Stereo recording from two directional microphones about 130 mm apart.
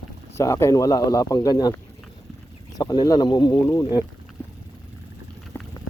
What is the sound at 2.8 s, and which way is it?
A man's voice, 30° left (ahead or behind).